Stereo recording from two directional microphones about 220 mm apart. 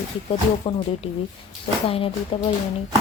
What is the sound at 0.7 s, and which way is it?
Speech, 25° left (ahead or behind).